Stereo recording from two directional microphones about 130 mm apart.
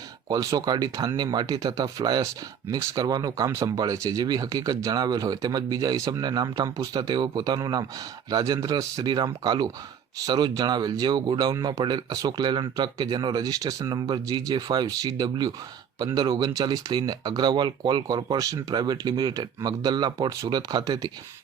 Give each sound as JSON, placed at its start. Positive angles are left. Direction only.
{"t": 0.3, "sound": "speech", "side_deg": -30}